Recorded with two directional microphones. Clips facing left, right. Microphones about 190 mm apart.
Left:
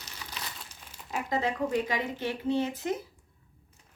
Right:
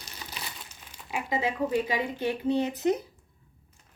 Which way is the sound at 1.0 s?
5° right (ahead or behind).